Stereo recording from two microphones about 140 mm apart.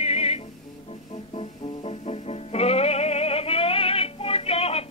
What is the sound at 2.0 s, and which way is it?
Music, 45° left (ahead or behind).